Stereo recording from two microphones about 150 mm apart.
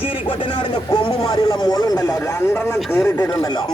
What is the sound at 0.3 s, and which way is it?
Speech, 30° left (ahead or behind).